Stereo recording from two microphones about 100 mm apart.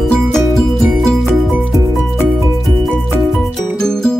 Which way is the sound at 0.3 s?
5° left (ahead or behind).